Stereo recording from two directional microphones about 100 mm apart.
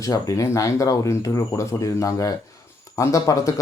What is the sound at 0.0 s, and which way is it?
Speech, 35° left (ahead or behind).